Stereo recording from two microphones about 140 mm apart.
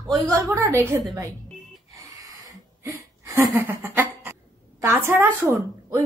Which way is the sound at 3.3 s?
20° right (ahead or behind).